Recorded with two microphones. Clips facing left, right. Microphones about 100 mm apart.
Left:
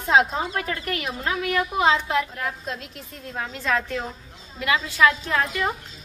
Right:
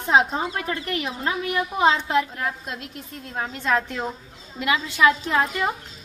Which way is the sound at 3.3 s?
20° right (ahead or behind).